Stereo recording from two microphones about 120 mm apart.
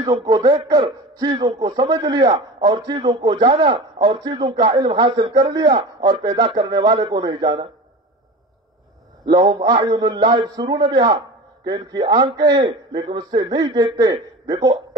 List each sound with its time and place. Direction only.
0.1 s a man's voice: 40° right (ahead or behind)
9.3 s a man's voice: 35° right (ahead or behind)